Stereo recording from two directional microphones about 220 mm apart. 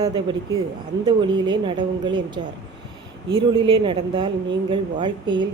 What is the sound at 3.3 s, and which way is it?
A woman's voice, 25° right (ahead or behind).